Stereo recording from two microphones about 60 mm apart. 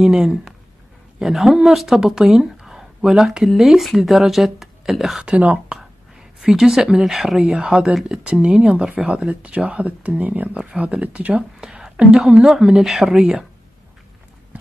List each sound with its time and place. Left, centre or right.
0.0 s speech: centre
5.2 s speech: right
5.7 s whispering: centre
7.3 s speech: centre
10.6 s speech: centre
11.3 s a sound: centre
12.2 s speech: centre